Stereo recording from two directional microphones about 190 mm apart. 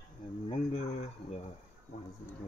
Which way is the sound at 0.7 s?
35° left (ahead or behind).